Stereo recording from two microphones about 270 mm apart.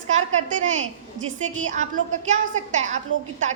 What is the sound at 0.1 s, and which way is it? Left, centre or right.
A woman's voice, right.